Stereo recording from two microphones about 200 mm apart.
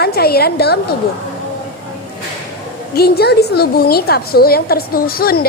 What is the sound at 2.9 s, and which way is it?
A woman's voice, 50° left (ahead or behind).